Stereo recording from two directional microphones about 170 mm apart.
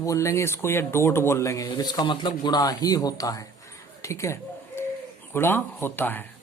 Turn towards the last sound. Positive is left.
turn(degrees=10)  # may be behind; listen again after turning